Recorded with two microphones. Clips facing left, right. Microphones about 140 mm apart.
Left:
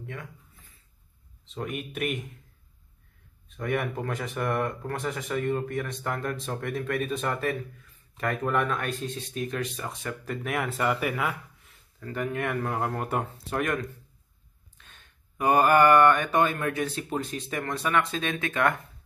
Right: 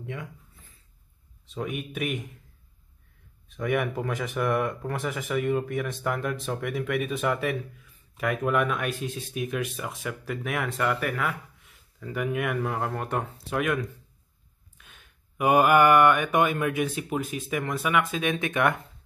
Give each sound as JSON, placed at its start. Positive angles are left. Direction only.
{"t": 0.0, "sound": "speech", "side_deg": -20}
{"t": 1.5, "sound": "speech", "side_deg": 0}
{"t": 3.6, "sound": "speech", "side_deg": -5}
{"t": 12.0, "sound": "speech", "side_deg": -10}
{"t": 14.8, "sound": "mantra", "side_deg": -10}